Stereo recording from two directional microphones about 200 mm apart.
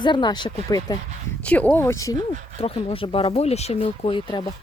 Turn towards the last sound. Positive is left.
turn(degrees=25)  # may be behind; listen again after turning